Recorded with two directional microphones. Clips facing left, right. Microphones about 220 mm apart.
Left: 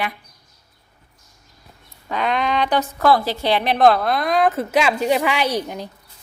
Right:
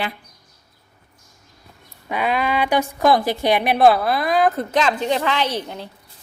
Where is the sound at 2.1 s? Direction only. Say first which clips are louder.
Even; 5° right (ahead or behind); by 5.8 s 15° left (ahead or behind).